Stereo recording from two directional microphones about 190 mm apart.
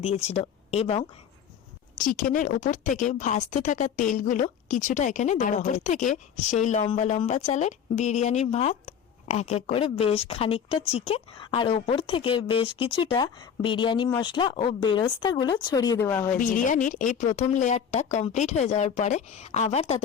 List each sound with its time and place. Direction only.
0.0 s speech: 35° left (ahead or behind)
2.0 s a woman's voice: 45° left (ahead or behind); by 16.4 s 10° left (ahead or behind)
16.4 s a woman's voice: 45° left (ahead or behind)